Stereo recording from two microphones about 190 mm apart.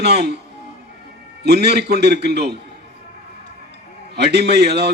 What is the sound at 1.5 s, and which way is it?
A man's voice, 60° right (ahead or behind).